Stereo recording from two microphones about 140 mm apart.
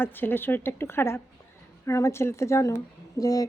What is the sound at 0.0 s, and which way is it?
A woman's voice, 15° left (ahead or behind).